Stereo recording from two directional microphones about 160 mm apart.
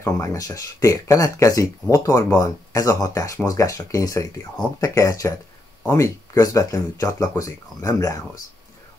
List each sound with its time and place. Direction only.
0.0 s speech: 20° left (ahead or behind)